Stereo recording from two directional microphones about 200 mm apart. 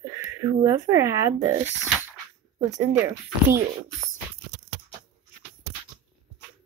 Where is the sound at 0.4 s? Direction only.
15° right (ahead or behind).